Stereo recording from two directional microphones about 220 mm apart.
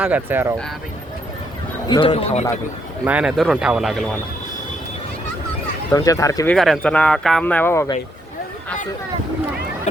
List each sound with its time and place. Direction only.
0.0 s speech: 10° right (ahead or behind)
1.9 s speech: 25° left (ahead or behind)
3.0 s speech: 5° right (ahead or behind)
5.9 s speech: 15° left (ahead or behind)